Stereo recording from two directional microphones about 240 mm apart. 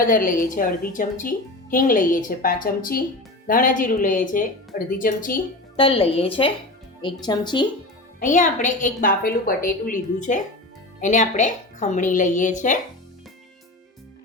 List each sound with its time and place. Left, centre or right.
0.0 s a woman's voice: left
5.7 s speech: left
8.2 s a woman's voice: left